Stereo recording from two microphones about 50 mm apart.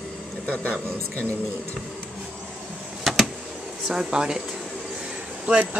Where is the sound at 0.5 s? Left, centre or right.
Left.